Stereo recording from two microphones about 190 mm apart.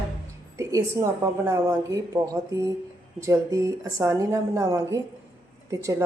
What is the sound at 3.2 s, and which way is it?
A woman's voice, 15° right (ahead or behind).